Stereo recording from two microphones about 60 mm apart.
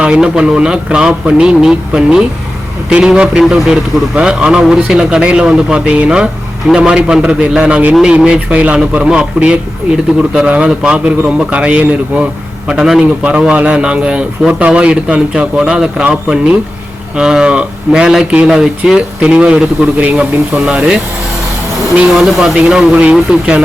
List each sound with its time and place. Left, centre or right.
0.0 s a man's voice: centre